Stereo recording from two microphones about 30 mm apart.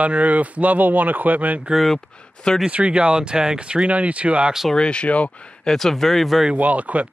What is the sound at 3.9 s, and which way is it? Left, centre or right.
Speech, right.